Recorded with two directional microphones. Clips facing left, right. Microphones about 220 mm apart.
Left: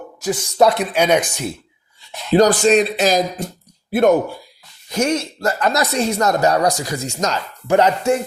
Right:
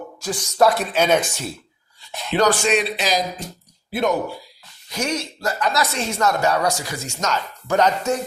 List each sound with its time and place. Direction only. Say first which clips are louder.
0.2 s speech: left 3 dB; 20° left (ahead or behind)
2.3 s speech: left 6 dB; 40° left (ahead or behind)